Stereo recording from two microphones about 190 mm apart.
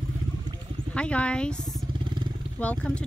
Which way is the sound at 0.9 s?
5° left (ahead or behind).